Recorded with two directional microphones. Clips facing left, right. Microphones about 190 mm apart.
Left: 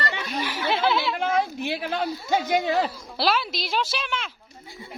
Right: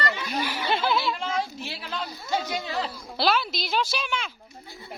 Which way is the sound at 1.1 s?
60° left (ahead or behind).